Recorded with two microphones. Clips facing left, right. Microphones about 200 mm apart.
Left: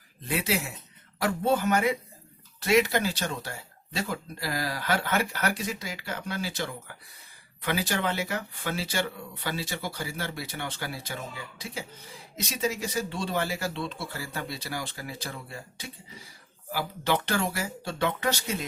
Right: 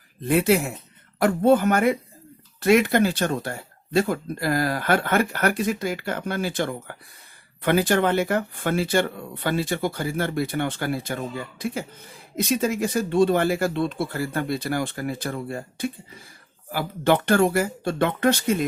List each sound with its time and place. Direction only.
0.2 s speech: 55° right (ahead or behind)